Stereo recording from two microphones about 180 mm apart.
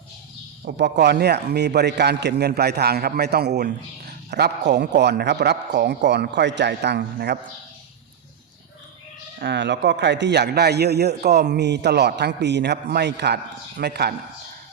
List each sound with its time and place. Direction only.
0.6 s a man's voice: 65° right (ahead or behind)
9.4 s a man's voice: 75° right (ahead or behind)